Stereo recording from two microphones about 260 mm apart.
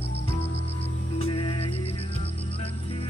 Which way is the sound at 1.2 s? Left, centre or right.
Left.